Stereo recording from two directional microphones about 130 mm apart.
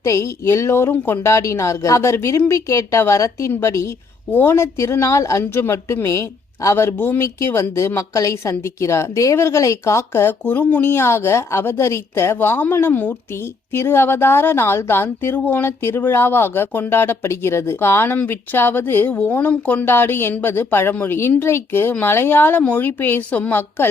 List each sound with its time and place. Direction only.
0.0 s a woman's voice: 25° left (ahead or behind)